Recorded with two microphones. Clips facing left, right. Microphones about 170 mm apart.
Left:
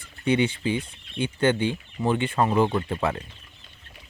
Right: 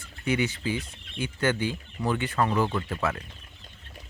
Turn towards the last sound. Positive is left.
turn(degrees=30)  # may be behind; listen again after turning